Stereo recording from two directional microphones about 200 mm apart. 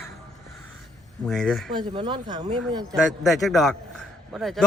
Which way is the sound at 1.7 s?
25° right (ahead or behind).